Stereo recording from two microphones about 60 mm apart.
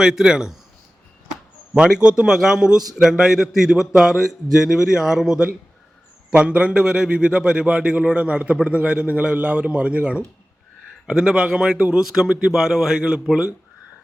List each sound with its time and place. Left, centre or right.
0.0 s a man's voice: centre
1.8 s a man's voice: centre